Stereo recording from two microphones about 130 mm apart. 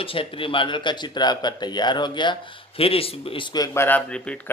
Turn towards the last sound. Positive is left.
turn(degrees=10)  # may be behind; listen again after turning